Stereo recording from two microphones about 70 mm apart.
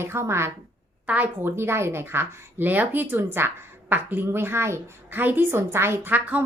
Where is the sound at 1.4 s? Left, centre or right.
Right.